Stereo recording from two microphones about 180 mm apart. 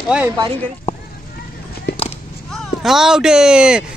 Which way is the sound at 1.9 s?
70° left (ahead or behind).